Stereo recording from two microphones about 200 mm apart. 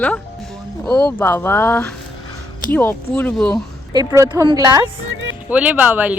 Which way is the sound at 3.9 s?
15° right (ahead or behind).